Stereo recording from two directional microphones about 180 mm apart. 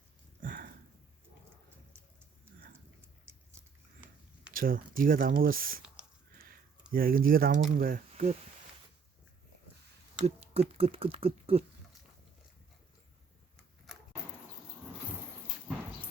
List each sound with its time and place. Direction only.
0.4 s sniff: 50° right (ahead or behind)
4.5 s speech: 55° right (ahead or behind)
6.9 s speech: 55° right (ahead or behind)
10.2 s speech: 35° right (ahead or behind)